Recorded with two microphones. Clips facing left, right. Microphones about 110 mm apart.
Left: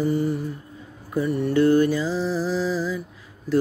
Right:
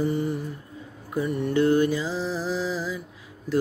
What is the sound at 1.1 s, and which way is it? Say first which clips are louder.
Mantra: left 3 dB; 20° right (ahead or behind).